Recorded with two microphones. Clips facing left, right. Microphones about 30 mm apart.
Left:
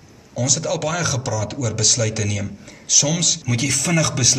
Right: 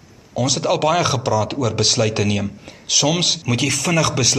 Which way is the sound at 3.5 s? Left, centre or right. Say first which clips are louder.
Right 1 dB; centre.